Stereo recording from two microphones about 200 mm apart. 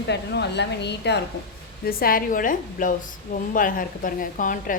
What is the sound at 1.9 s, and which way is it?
A woman's voice, 45° left (ahead or behind).